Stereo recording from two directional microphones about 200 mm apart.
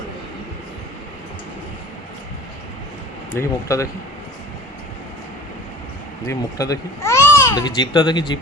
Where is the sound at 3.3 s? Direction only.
15° left (ahead or behind).